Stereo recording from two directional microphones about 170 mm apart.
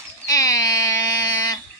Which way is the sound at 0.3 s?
20° left (ahead or behind).